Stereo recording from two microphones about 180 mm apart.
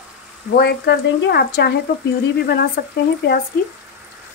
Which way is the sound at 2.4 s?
60° left (ahead or behind).